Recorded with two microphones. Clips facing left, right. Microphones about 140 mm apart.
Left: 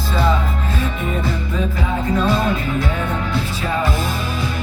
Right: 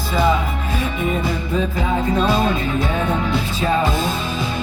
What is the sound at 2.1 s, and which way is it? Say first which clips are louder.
Music: left 1 dB; 20° right (ahead or behind).